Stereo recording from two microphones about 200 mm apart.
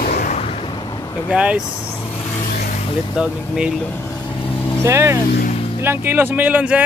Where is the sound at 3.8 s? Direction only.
10° left (ahead or behind).